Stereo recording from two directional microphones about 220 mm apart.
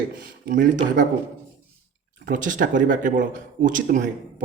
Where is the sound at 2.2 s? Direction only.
35° right (ahead or behind).